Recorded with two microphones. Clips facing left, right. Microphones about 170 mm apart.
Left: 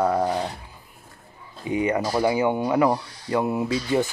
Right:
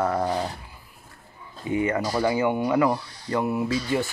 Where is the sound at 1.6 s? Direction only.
15° left (ahead or behind).